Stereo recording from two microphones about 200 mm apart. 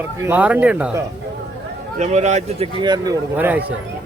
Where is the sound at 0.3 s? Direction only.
10° right (ahead or behind).